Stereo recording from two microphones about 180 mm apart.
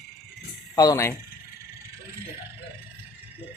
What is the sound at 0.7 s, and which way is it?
Speech, 20° left (ahead or behind).